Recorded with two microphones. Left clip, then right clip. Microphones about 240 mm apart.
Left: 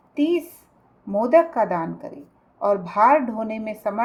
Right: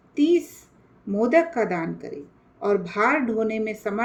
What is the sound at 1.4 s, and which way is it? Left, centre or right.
Speech, centre.